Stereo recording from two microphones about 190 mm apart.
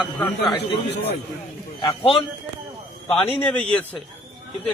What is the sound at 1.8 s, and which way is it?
Speech, 30° left (ahead or behind).